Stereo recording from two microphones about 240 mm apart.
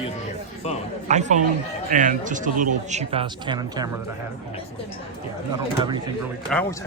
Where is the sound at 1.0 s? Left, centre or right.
Right.